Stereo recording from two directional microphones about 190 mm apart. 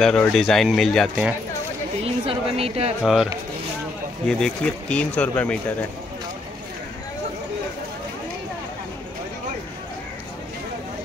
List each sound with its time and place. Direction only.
0.0 s speech: 5° left (ahead or behind)
2.0 s a sound: 30° right (ahead or behind)
3.0 s speech: centre (ahead or behind)
4.3 s speech: 5° left (ahead or behind)